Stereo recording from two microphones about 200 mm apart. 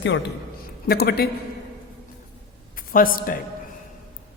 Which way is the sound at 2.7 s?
45° left (ahead or behind).